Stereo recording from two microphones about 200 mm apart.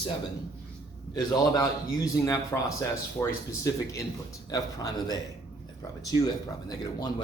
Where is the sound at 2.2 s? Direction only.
15° left (ahead or behind).